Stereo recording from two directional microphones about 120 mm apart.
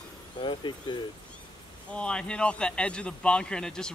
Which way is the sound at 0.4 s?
45° left (ahead or behind).